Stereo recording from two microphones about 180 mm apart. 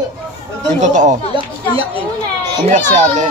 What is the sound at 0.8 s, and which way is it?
Speech, 45° right (ahead or behind).